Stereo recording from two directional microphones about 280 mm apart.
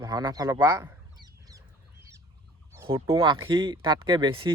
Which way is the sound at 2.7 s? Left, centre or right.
Centre.